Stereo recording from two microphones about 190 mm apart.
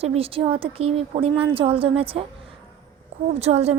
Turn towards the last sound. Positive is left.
turn(degrees=-35)  # may be behind; listen again after turning